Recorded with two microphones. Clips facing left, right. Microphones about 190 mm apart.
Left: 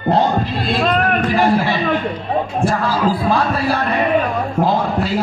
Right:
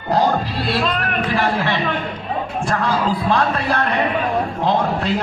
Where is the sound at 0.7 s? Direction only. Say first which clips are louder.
Left 6 dB; 50° left (ahead or behind).